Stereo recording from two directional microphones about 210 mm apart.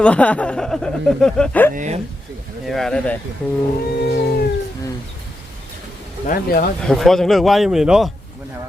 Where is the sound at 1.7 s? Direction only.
35° right (ahead or behind).